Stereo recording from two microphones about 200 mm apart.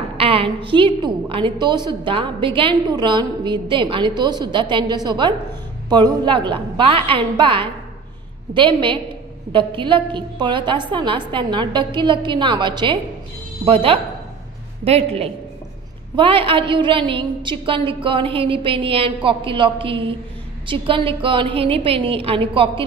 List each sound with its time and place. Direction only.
0.2 s a woman's voice: 30° right (ahead or behind)